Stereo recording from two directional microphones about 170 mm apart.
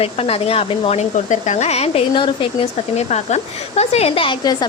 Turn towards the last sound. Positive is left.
turn(degrees=25)  # may be behind; listen again after turning